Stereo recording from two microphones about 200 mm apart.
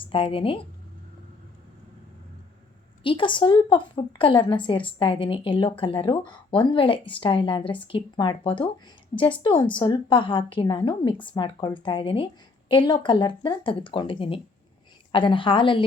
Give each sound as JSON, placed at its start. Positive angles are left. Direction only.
{"t": 0.0, "sound": "speech", "side_deg": 25}
{"t": 3.0, "sound": "a woman's voice", "side_deg": 25}